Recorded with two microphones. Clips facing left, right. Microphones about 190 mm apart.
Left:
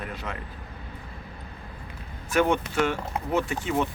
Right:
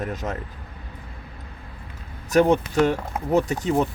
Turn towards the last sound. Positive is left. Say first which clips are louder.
# right 5 dB
turn(degrees=-40)  # may be behind; listen again after turning